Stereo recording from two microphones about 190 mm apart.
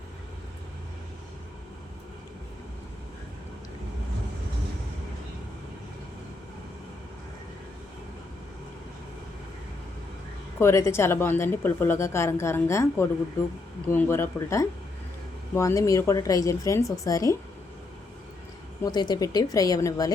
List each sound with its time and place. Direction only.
10.6 s a woman's voice: 15° left (ahead or behind)
18.8 s speech: 20° left (ahead or behind)